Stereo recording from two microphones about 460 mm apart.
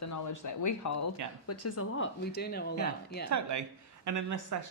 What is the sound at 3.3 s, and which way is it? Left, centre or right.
Speech, right.